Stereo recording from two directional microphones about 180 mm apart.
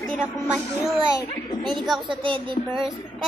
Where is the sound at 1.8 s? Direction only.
Centre (ahead or behind).